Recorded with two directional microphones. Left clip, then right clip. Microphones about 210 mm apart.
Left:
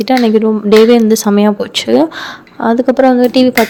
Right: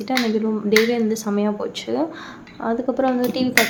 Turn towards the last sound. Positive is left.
turn(degrees=40)  # may be behind; listen again after turning